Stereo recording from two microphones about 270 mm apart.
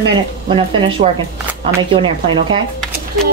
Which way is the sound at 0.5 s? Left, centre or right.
Centre.